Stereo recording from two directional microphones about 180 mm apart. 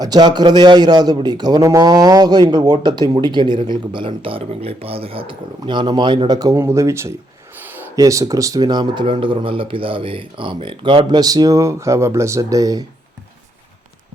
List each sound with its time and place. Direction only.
0.0 s a man's voice: 20° right (ahead or behind)